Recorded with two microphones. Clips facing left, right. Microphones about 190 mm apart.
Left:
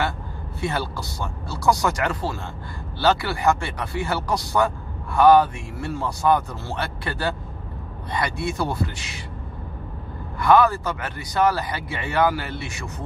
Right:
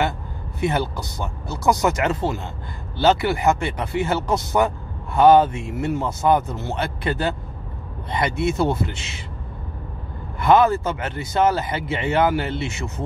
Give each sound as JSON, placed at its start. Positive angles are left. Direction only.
{"t": 0.6, "sound": "speech", "side_deg": -20}
{"t": 10.4, "sound": "speech", "side_deg": -20}